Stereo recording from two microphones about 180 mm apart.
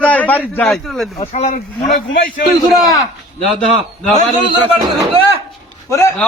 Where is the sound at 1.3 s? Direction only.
40° left (ahead or behind).